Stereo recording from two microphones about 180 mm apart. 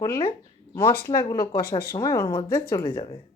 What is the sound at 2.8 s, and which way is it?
Speech, 30° left (ahead or behind).